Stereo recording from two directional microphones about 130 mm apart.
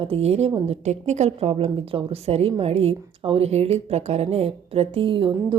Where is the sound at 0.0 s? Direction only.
50° right (ahead or behind).